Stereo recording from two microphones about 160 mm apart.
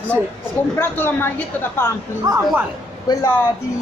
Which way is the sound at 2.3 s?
25° right (ahead or behind).